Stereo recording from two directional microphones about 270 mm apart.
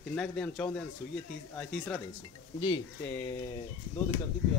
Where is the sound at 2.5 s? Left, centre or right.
Centre.